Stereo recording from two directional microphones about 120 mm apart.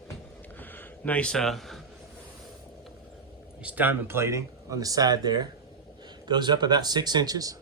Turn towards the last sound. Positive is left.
turn(degrees=-30)  # may be behind; listen again after turning